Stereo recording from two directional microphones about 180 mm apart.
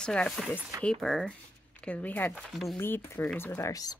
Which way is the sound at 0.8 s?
5° left (ahead or behind).